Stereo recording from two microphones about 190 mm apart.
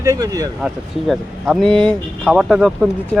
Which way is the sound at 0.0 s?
20° right (ahead or behind).